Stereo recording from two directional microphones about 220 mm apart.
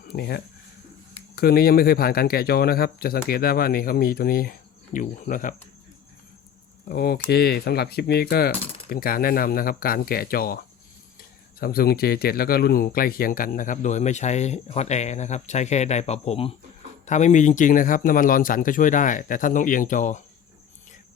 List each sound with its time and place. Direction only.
0.1 s speech: 45° left (ahead or behind)
6.8 s speech: 45° left (ahead or behind)
11.6 s speech: 45° left (ahead or behind)